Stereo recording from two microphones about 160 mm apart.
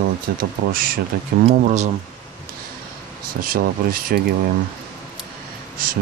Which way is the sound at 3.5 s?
65° right (ahead or behind).